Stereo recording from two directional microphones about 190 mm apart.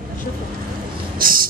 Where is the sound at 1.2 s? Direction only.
50° right (ahead or behind).